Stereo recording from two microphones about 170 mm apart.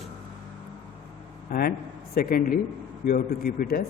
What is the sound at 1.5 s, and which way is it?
A man's voice, 60° left (ahead or behind).